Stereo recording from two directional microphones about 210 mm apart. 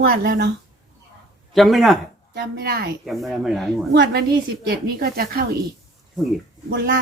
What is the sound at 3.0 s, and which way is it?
Speech, centre (ahead or behind).